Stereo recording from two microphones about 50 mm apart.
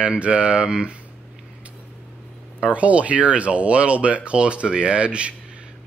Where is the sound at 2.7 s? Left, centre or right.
Right.